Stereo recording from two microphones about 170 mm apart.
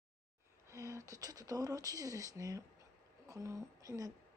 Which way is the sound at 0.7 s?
15° right (ahead or behind).